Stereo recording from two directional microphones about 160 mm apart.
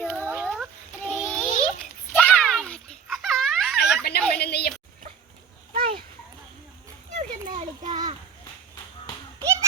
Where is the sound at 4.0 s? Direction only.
75° left (ahead or behind).